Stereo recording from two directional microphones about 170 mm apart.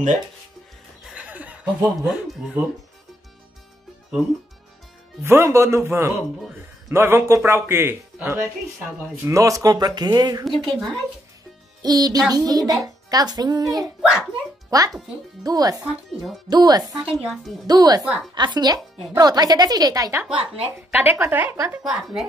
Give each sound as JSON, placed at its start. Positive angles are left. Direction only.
{"t": 1.0, "sound": "chuckle", "side_deg": -5}
{"t": 5.2, "sound": "a woman's voice", "side_deg": -15}
{"t": 10.4, "sound": "a woman's voice", "side_deg": 0}
{"t": 11.8, "sound": "a woman's voice", "side_deg": -20}
{"t": 14.0, "sound": "a woman's voice", "side_deg": -5}
{"t": 15.4, "sound": "a woman's voice", "side_deg": -20}
{"t": 16.1, "sound": "a woman's voice", "side_deg": 0}
{"t": 16.4, "sound": "a woman's voice", "side_deg": -25}
{"t": 18.0, "sound": "speech", "side_deg": -5}
{"t": 18.3, "sound": "a woman's voice", "side_deg": -25}
{"t": 21.8, "sound": "a woman's voice", "side_deg": 0}